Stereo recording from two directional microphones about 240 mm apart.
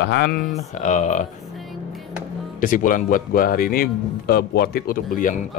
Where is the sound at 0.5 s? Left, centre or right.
Left.